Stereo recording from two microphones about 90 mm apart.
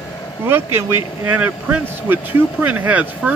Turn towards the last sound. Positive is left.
turn(degrees=-20)  # may be behind; listen again after turning